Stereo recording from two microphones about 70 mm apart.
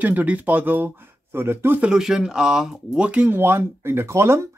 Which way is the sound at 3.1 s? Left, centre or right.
Right.